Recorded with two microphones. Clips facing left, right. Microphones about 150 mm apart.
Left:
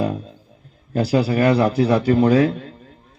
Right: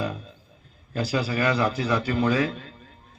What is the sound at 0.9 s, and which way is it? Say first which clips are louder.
A man's voice: left 8 dB; 60° left (ahead or behind).